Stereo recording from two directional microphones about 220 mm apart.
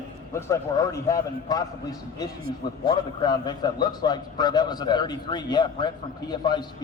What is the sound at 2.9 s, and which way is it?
A man's voice, 20° left (ahead or behind).